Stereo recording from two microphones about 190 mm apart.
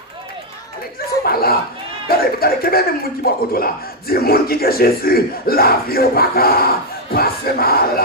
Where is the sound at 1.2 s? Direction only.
55° left (ahead or behind).